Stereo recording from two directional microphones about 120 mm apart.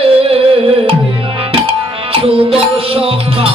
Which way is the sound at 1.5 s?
50° right (ahead or behind).